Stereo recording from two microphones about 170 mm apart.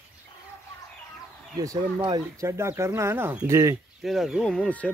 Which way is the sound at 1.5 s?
20° right (ahead or behind).